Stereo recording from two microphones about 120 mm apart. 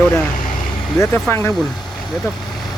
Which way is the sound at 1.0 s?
20° left (ahead or behind).